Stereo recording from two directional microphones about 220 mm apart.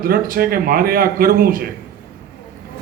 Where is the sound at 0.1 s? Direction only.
45° right (ahead or behind).